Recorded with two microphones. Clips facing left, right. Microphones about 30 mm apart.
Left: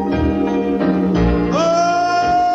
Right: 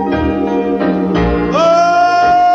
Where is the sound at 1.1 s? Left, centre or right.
Right.